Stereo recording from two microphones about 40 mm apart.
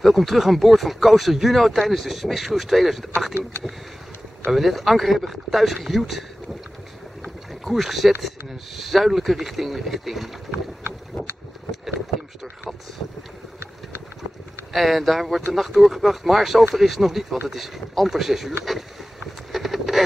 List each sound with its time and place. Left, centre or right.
0.0 s speech: centre
4.5 s speech: centre
7.6 s speech: centre
14.7 s speech: centre
19.5 s a sound: centre